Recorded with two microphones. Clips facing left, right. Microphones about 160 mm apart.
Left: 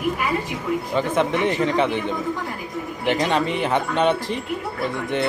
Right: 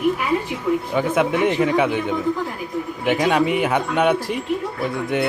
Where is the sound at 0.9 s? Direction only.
10° right (ahead or behind).